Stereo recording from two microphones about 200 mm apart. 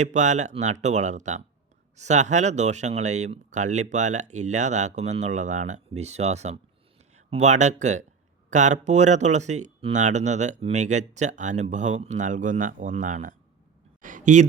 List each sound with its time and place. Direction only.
0.0 s speech: 35° right (ahead or behind)